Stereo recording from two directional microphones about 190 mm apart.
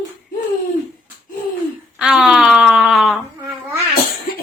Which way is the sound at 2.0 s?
Centre (ahead or behind).